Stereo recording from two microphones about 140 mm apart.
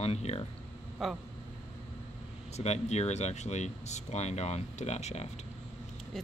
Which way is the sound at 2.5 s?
50° left (ahead or behind).